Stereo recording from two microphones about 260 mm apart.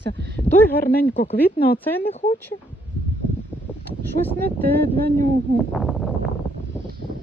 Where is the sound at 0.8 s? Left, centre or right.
Left.